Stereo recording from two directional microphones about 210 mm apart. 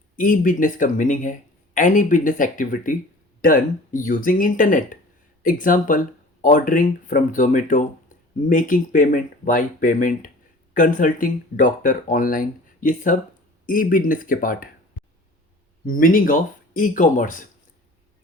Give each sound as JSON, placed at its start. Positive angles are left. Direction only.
{"t": 0.2, "sound": "speech", "side_deg": 40}
{"t": 15.9, "sound": "speech", "side_deg": 40}